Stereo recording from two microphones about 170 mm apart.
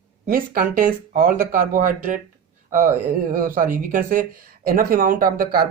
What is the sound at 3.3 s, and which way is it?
Speech, 55° right (ahead or behind).